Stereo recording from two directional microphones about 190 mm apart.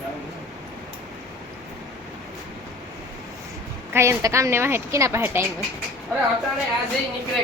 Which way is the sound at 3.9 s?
15° right (ahead or behind).